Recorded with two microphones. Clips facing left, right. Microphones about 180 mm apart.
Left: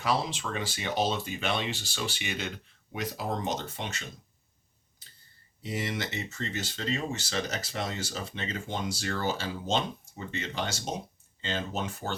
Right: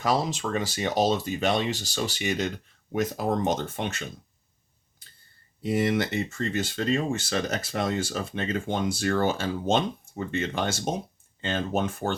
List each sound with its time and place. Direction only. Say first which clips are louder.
0.0 s speech: right 4 dB; 40° right (ahead or behind)
5.6 s speech: right 9 dB; 55° right (ahead or behind)